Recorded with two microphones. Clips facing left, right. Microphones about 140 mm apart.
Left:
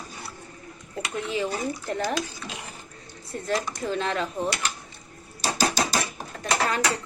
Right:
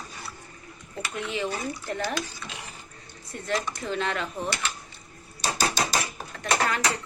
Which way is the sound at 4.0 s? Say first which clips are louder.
Left 1 dB; 35° left (ahead or behind).